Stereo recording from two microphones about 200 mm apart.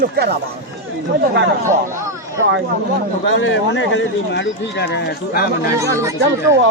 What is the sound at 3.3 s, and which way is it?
Speech, 70° left (ahead or behind).